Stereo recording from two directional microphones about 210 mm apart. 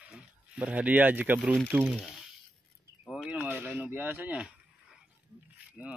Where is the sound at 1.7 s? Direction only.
5° right (ahead or behind).